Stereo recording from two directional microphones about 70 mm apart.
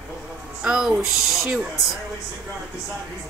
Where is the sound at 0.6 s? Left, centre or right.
Centre.